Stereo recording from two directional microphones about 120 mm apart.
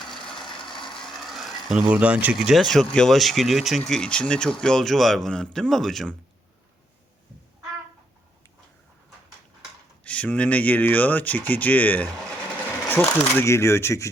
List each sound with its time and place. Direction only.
0.3 s a sound: 5° left (ahead or behind)
1.9 s speech: 10° right (ahead or behind)
10.0 s speech: 10° left (ahead or behind)